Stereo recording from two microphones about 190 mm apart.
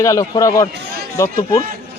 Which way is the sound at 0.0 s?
15° left (ahead or behind).